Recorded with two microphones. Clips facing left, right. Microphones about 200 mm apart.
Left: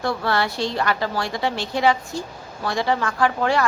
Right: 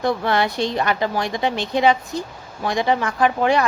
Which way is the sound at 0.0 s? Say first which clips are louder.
Right 3 dB; 20° right (ahead or behind).